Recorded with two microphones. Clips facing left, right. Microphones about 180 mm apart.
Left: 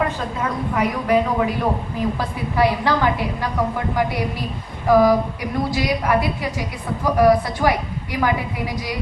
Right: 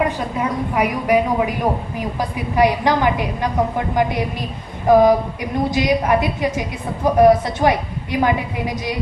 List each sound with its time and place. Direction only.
0.3 s a woman's voice: 15° right (ahead or behind)